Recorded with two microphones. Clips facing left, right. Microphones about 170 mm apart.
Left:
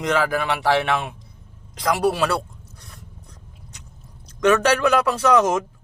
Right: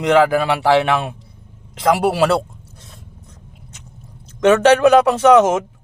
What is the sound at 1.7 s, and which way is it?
Speech, 25° right (ahead or behind).